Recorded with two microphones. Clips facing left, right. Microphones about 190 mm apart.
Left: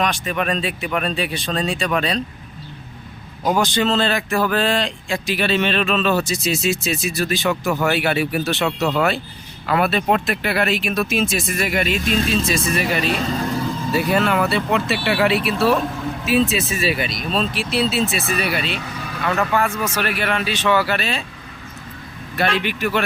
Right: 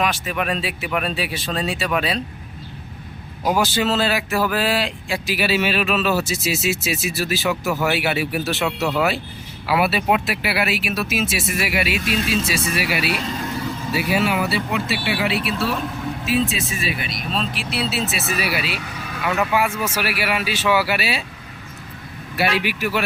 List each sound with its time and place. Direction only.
0.0 s speech: 5° right (ahead or behind)
3.4 s speech: 5° right (ahead or behind)
15.4 s speech: 60° left (ahead or behind)
16.5 s speech: centre (ahead or behind)
22.4 s speech: 10° right (ahead or behind)